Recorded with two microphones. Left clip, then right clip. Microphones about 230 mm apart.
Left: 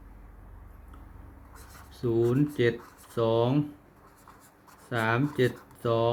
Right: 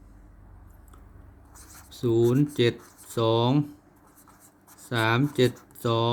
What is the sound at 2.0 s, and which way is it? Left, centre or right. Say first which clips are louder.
Speech: right 3 dB; right.